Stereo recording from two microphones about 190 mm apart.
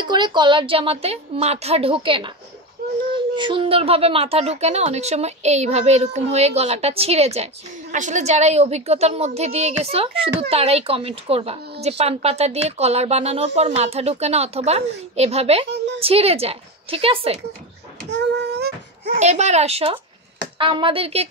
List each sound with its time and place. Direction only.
0.0 s a woman's voice: 25° right (ahead or behind)
18.1 s a sound: 65° right (ahead or behind)
19.1 s speech: 35° right (ahead or behind)